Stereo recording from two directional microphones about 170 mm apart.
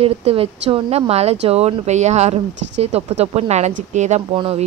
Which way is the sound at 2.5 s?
90° right.